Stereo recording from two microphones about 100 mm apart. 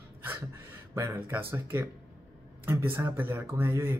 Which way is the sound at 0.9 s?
25° right (ahead or behind).